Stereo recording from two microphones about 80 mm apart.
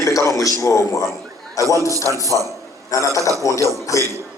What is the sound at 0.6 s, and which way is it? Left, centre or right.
A man's voice, left.